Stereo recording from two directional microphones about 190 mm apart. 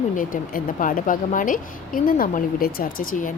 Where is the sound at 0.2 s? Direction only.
45° left (ahead or behind).